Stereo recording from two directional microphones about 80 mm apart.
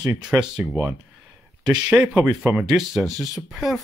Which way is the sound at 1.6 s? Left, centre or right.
Centre.